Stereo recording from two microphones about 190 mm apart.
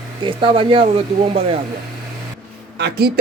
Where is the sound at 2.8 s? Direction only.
60° right (ahead or behind).